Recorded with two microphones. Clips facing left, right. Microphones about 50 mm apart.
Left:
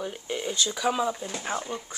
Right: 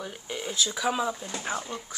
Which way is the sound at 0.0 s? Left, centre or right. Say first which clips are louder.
Left 4 dB; centre.